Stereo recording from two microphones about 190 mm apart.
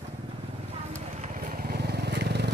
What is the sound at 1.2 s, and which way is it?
Vehicle, 45° right (ahead or behind).